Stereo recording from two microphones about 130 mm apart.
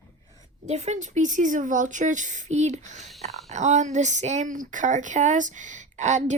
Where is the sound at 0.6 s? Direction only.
60° right (ahead or behind).